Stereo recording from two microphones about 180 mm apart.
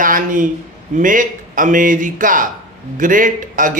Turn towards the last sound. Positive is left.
turn(degrees=-45)  # may be behind; listen again after turning